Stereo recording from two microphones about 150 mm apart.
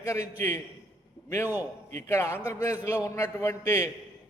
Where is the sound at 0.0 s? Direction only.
20° left (ahead or behind).